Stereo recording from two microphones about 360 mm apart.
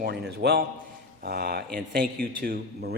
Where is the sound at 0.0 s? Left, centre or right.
Right.